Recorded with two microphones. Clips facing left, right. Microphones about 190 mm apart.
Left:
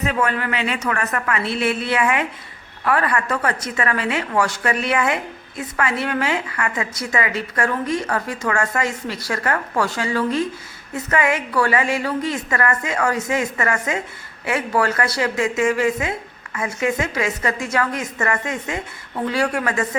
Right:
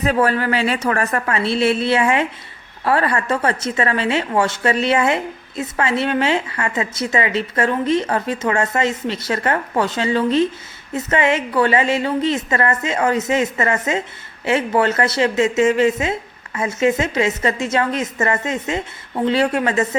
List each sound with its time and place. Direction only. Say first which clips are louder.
0.0 s a woman's voice: right 4 dB; 35° right (ahead or behind)